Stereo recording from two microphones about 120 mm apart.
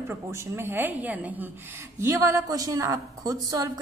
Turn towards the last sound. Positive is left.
turn(degrees=-30)  # may be behind; listen again after turning